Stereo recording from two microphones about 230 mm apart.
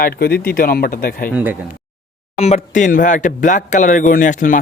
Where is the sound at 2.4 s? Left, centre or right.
Left.